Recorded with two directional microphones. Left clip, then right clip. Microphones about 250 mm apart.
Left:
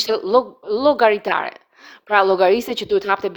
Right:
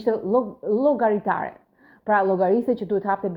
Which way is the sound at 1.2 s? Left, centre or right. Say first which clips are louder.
Left 4 dB; left.